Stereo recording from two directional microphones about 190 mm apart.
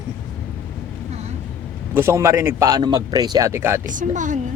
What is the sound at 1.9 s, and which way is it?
A man's voice, 15° right (ahead or behind).